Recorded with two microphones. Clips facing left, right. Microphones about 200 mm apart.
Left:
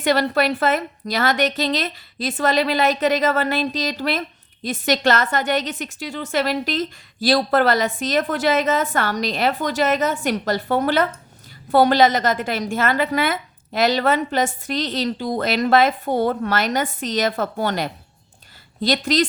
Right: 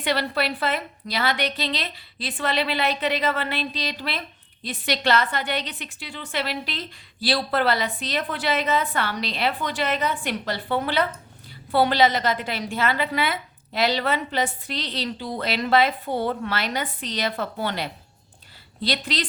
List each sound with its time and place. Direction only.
0.0 s a woman's voice: 45° left (ahead or behind)